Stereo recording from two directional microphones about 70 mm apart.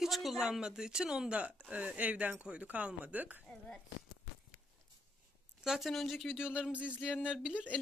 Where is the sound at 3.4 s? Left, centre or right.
Centre.